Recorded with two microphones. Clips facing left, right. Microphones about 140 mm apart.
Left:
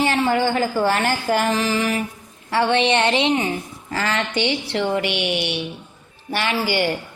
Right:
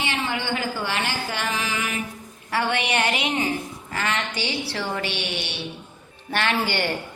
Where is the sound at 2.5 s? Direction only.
25° left (ahead or behind).